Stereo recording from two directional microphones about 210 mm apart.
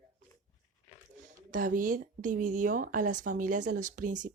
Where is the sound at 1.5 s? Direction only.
40° right (ahead or behind).